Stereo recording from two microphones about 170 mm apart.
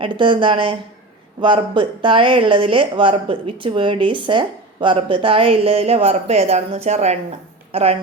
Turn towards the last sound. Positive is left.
turn(degrees=-35)  # may be behind; listen again after turning